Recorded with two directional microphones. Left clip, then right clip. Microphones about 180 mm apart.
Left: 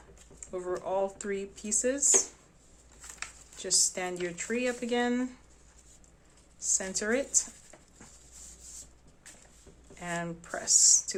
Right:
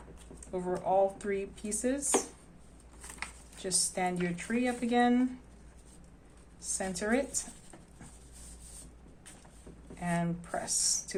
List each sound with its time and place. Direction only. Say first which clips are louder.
0.5 s speech: right 3 dB; 20° left (ahead or behind)
3.2 s speech: even; 20° left (ahead or behind)
6.6 s speech: left 3 dB; 20° left (ahead or behind)
10.0 s speech: right 1 dB; 25° left (ahead or behind)